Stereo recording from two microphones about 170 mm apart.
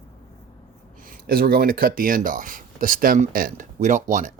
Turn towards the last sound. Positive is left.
turn(degrees=-45)  # may be behind; listen again after turning